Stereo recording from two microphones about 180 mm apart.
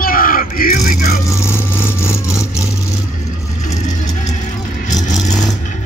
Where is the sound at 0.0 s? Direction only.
50° left (ahead or behind).